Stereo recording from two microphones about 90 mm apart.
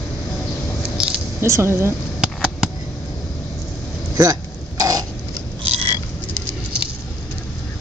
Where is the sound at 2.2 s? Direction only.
10° right (ahead or behind).